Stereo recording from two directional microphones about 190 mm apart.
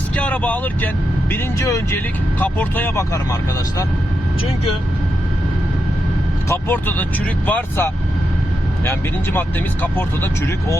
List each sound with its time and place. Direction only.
0.2 s speech: 5° left (ahead or behind)
6.5 s speech: 10° left (ahead or behind)